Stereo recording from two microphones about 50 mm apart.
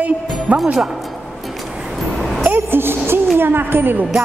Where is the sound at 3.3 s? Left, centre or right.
Right.